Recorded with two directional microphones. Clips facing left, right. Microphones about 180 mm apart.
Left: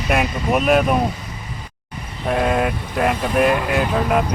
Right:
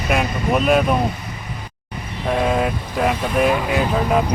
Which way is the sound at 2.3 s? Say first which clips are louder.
Even; centre (ahead or behind).